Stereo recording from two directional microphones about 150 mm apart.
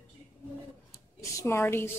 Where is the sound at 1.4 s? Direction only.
20° left (ahead or behind).